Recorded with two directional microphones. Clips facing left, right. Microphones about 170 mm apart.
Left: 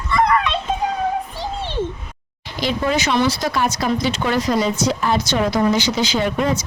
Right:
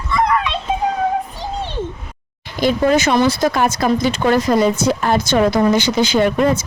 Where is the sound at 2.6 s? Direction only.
50° right (ahead or behind).